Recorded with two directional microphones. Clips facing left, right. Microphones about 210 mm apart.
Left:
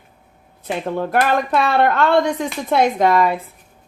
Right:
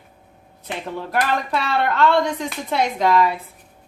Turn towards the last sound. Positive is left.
turn(degrees=50)  # may be behind; listen again after turning